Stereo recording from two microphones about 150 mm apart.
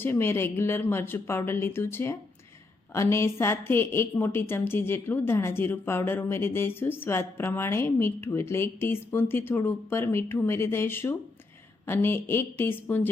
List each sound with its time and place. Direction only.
0.0 s a woman's voice: 15° left (ahead or behind)